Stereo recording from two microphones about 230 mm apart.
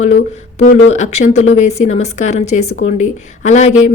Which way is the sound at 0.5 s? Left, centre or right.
Left.